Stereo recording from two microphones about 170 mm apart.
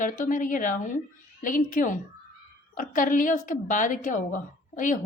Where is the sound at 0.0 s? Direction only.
50° left (ahead or behind).